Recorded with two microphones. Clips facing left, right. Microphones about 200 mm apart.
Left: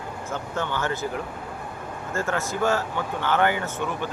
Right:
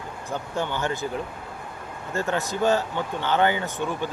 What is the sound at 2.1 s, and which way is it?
Speech, 20° right (ahead or behind).